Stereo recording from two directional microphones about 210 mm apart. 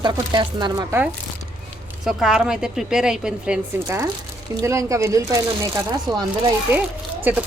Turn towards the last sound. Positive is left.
turn(degrees=-10)  # may be behind; listen again after turning